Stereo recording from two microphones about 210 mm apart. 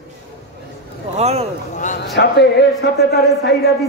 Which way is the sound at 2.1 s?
55° left (ahead or behind).